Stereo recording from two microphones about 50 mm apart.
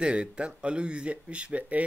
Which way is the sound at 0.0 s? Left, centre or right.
Right.